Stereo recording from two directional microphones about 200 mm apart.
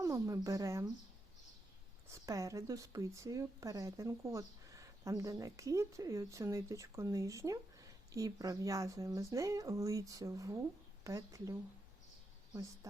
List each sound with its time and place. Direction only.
0.0 s speech: 15° right (ahead or behind)
2.0 s speech: 15° right (ahead or behind)
12.8 s speech: 15° right (ahead or behind)